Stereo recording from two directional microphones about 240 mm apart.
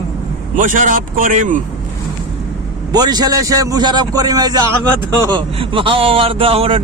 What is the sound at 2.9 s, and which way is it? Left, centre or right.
A man's voice, centre.